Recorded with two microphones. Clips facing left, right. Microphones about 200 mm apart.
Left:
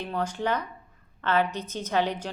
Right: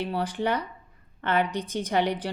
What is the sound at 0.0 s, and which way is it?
A woman's voice, 10° right (ahead or behind).